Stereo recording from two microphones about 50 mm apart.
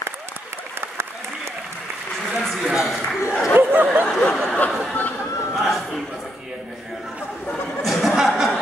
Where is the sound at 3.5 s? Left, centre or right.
Right.